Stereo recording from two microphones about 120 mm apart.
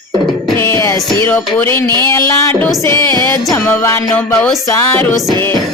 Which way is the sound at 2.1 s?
25° left (ahead or behind).